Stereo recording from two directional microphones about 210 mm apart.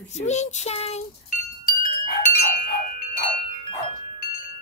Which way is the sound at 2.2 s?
40° left (ahead or behind).